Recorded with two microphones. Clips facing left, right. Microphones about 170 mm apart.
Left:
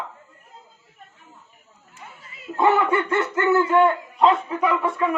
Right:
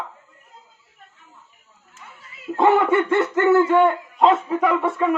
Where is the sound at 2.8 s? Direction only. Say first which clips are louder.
Right 4 dB; 20° right (ahead or behind).